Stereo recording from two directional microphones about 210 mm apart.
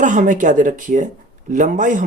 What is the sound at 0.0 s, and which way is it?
Speech, 35° right (ahead or behind).